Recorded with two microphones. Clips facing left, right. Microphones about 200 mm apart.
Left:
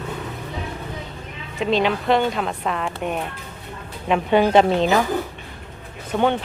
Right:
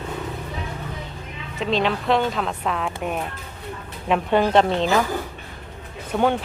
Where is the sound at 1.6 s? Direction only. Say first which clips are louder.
Left 2 dB; centre (ahead or behind).